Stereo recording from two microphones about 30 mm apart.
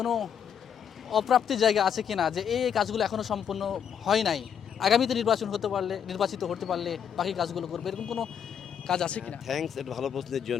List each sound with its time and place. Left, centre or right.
0.0 s speech: centre
9.0 s speech: left
9.5 s speech: centre